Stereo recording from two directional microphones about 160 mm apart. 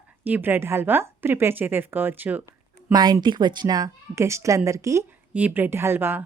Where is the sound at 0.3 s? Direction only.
10° right (ahead or behind).